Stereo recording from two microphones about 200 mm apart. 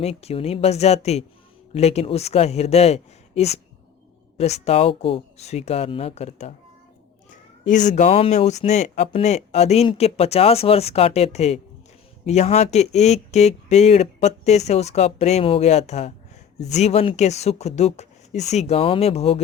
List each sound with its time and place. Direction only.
0.0 s speech: 30° left (ahead or behind)
7.7 s speech: 40° left (ahead or behind)